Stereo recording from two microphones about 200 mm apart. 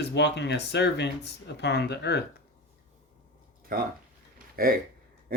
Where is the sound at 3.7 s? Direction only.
45° right (ahead or behind).